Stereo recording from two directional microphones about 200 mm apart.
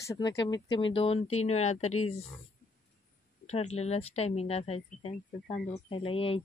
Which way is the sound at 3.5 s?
35° left (ahead or behind).